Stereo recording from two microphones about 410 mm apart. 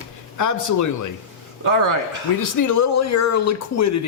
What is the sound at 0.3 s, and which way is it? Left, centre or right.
Speech, left.